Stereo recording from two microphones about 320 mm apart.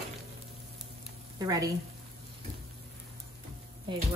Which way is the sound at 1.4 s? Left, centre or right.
Centre.